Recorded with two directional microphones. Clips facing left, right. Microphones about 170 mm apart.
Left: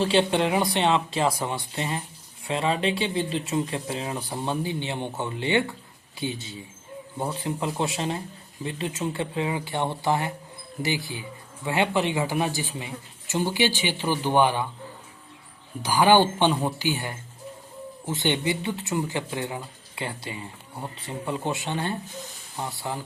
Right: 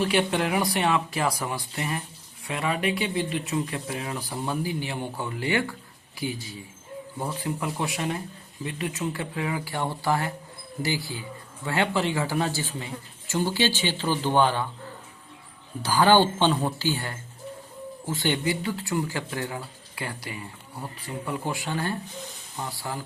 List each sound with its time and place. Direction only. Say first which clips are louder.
0.0 s speech: left 2 dB; 25° left (ahead or behind)
15.8 s speech: left 1 dB; 15° left (ahead or behind)